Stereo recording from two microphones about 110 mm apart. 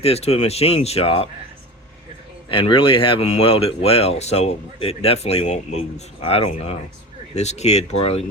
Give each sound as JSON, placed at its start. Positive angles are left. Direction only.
{"t": 0.0, "sound": "speech", "side_deg": 70}
{"t": 2.5, "sound": "speech", "side_deg": 55}
{"t": 7.3, "sound": "speech", "side_deg": 90}